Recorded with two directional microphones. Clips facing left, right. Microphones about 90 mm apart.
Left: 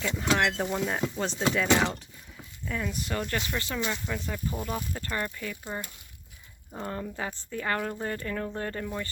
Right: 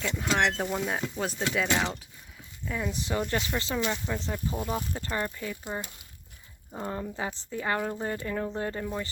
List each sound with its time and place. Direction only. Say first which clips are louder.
0.0 s speech: even; centre (ahead or behind)
2.9 s speech: right 2 dB; 25° right (ahead or behind)